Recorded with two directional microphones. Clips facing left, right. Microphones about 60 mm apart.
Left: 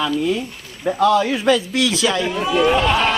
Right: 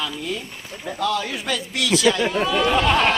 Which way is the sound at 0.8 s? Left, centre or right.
Left.